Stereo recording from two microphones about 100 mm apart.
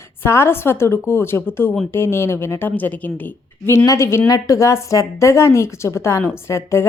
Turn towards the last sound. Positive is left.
turn(degrees=25)  # may be behind; listen again after turning